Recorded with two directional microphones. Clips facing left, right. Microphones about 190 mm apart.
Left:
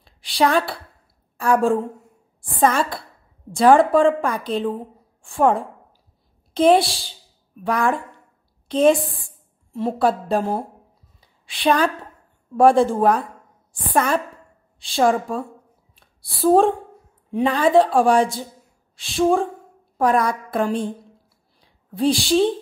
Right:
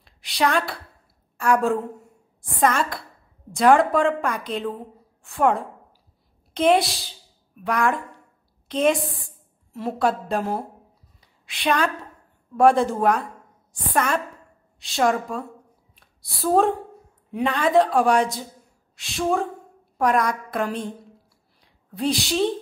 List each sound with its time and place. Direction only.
0.0 s a woman's voice: 30° left (ahead or behind)
21.9 s a woman's voice: 30° left (ahead or behind)